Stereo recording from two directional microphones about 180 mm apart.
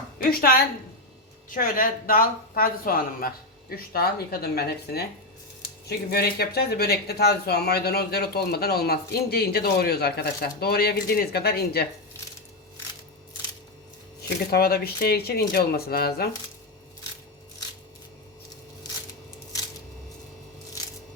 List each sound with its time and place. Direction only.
0.2 s speech: 55° left (ahead or behind)
14.5 s speech: 60° left (ahead or behind)